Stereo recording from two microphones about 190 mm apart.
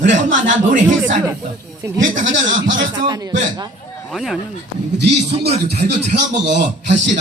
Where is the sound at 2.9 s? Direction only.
20° right (ahead or behind).